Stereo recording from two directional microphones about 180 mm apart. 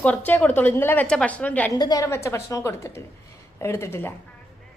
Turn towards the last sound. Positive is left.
turn(degrees=10)  # may be behind; listen again after turning